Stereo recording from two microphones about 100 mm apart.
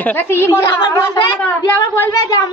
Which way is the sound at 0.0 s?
20° left (ahead or behind).